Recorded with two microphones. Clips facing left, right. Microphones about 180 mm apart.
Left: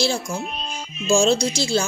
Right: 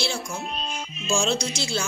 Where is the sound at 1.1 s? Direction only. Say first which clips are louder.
Left 7 dB; 35° left (ahead or behind).